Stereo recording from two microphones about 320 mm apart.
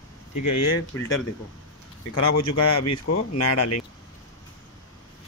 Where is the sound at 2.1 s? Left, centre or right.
Left.